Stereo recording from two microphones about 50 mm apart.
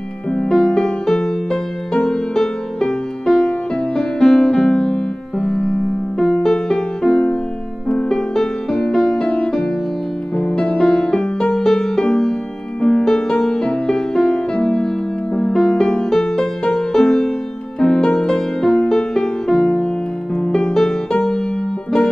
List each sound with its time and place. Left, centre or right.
0.3 s music: centre